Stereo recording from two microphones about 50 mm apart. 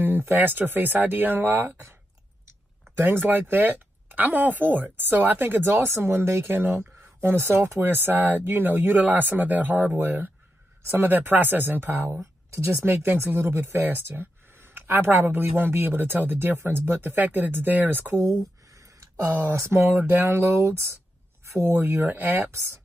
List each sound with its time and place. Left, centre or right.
0.0 s speech: right
3.0 s speech: right
12.5 s speech: right
12.8 s speech: right
13.7 s speech: right
17.2 s speech: right
18.7 s a sound: right
19.8 s speech: right
20.6 s speech: right
21.5 s speech: right
21.8 s speech: right
22.5 s speech: right